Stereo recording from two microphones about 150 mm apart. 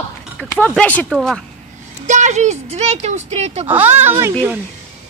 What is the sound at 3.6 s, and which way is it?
Speech, 10° right (ahead or behind).